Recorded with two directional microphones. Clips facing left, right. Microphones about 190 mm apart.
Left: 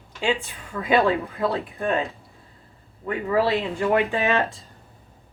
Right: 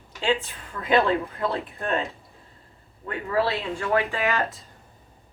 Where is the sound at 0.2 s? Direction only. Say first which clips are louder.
Even; 10° left (ahead or behind).